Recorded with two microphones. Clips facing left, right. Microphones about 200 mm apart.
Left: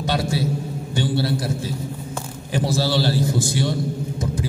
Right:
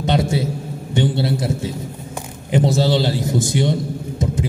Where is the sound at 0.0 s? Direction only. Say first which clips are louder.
Right 4 dB; 20° right (ahead or behind).